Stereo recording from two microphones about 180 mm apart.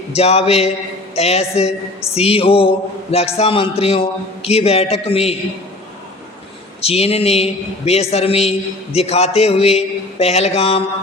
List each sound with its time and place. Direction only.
0.1 s a man's voice: 35° left (ahead or behind)
6.8 s a man's voice: 35° left (ahead or behind)